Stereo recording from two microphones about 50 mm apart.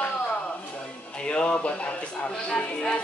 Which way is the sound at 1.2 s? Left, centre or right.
Left.